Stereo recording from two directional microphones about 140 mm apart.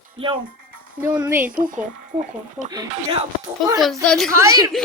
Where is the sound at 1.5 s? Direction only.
75° right (ahead or behind).